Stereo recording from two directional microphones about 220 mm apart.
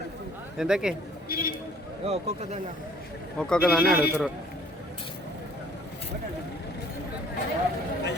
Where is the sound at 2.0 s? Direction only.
30° right (ahead or behind).